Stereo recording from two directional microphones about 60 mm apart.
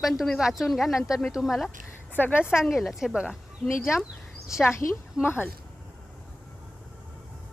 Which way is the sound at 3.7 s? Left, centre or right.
Left.